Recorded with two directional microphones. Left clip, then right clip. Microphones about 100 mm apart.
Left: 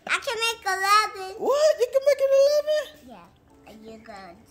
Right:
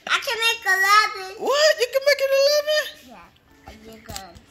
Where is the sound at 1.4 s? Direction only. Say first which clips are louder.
Right 2 dB; 30° left (ahead or behind).